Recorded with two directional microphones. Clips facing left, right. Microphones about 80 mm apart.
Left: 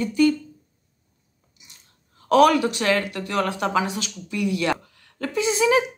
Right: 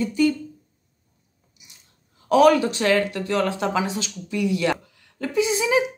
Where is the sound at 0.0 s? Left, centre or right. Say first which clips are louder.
Left 1 dB; right.